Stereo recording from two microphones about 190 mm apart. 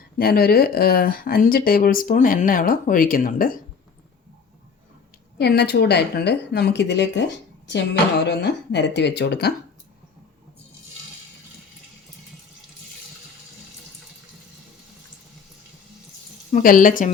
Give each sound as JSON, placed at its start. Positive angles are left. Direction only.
{"t": 0.2, "sound": "speech", "side_deg": 55}
{"t": 5.4, "sound": "a woman's voice", "side_deg": 60}
{"t": 16.5, "sound": "a woman's voice", "side_deg": 45}